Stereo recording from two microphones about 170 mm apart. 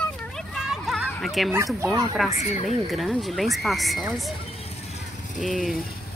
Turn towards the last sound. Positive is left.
turn(degrees=0)  # may be behind; listen again after turning